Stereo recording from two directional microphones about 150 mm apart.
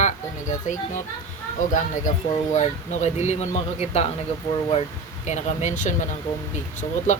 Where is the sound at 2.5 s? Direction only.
50° left (ahead or behind).